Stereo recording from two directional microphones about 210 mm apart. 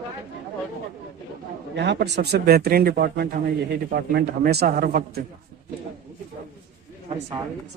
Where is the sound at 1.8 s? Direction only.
55° right (ahead or behind).